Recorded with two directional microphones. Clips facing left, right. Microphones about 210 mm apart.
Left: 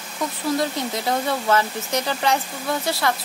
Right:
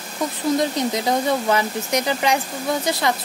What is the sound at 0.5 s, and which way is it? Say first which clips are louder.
Speech: right 3 dB; 15° right (ahead or behind).